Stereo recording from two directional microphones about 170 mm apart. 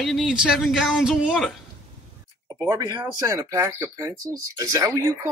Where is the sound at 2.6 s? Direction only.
20° right (ahead or behind).